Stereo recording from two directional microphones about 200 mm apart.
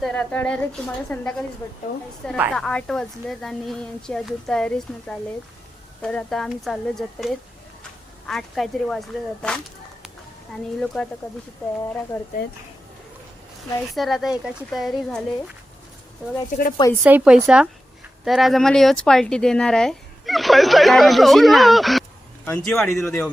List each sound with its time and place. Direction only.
0.0 s speech: 5° left (ahead or behind)
10.8 s speech: 5° left (ahead or behind)
12.1 s speech: 15° left (ahead or behind)
13.9 s speech: centre (ahead or behind)
16.5 s speech: 45° left (ahead or behind)
17.0 s a woman's voice: 10° right (ahead or behind); by 23.3 s 10° left (ahead or behind)